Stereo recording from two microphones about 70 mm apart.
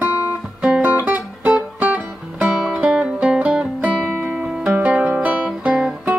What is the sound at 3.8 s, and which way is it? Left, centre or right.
Music, right.